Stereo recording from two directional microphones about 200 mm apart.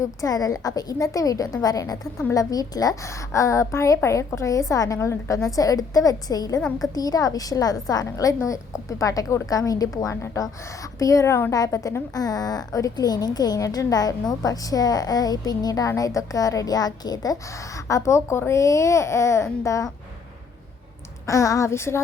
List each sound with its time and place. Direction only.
0.0 s a woman's voice: 15° left (ahead or behind)
6.6 s a woman's voice: centre (ahead or behind)
6.9 s a woman's voice: 20° left (ahead or behind)
21.2 s a woman's voice: 15° left (ahead or behind)